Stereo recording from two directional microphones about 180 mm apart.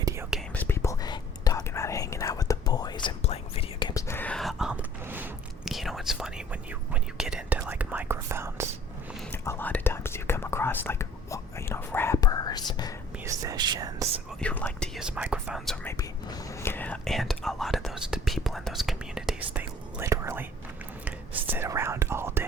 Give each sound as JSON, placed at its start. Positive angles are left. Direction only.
{"t": 0.0, "sound": "whispering", "side_deg": -15}
{"t": 0.5, "sound": "whispering", "side_deg": 10}
{"t": 9.3, "sound": "whispering", "side_deg": 15}
{"t": 13.2, "sound": "whispering", "side_deg": -20}
{"t": 14.4, "sound": "whispering", "side_deg": 5}
{"t": 14.9, "sound": "whispering", "side_deg": -5}